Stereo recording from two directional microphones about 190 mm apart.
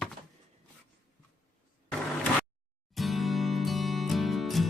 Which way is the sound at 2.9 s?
Centre (ahead or behind).